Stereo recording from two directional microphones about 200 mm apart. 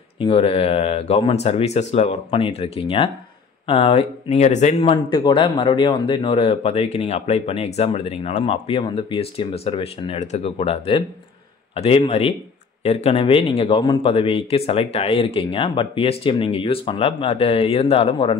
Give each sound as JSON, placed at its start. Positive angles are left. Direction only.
{"t": 0.2, "sound": "speech", "side_deg": 30}